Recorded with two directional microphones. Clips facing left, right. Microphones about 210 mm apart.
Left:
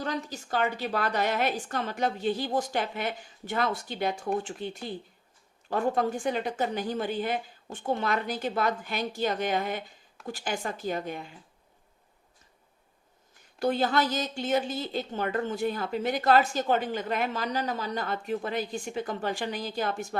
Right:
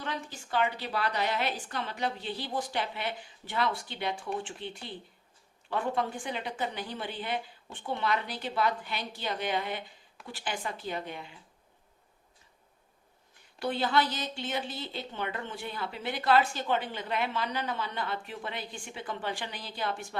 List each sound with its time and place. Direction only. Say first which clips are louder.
0.0 s a woman's voice: left 5 dB; 40° left (ahead or behind)
13.6 s a woman's voice: left 3 dB; 45° left (ahead or behind)